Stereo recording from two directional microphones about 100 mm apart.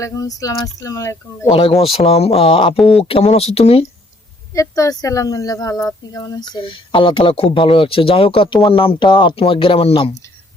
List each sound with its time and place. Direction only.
0.0 s speech: 35° left (ahead or behind)
1.5 s speech: 65° left (ahead or behind)
2.0 s speech: 90° left; by 2.7 s 60° left (ahead or behind)
2.7 s speech: centre (ahead or behind)
3.0 s speech: 80° left
4.5 s speech: 30° left (ahead or behind); by 10.1 s 70° left (ahead or behind)